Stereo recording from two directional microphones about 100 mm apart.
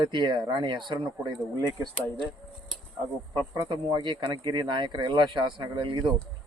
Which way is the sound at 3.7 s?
50° right (ahead or behind).